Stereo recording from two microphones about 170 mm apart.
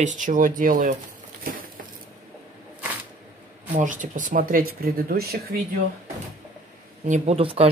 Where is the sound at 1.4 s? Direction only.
60° right (ahead or behind).